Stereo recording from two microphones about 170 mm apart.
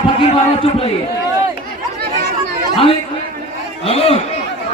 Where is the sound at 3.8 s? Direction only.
35° left (ahead or behind).